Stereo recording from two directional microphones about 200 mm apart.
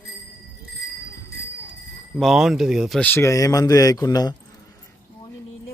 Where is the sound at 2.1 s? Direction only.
Centre (ahead or behind); by 4.4 s 20° left (ahead or behind).